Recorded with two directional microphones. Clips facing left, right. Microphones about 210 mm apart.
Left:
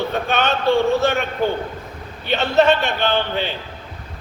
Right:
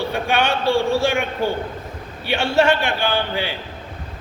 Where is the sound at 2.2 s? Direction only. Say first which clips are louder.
Left 2 dB; 10° right (ahead or behind).